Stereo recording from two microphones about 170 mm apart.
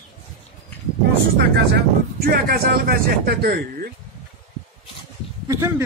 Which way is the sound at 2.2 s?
65° right (ahead or behind).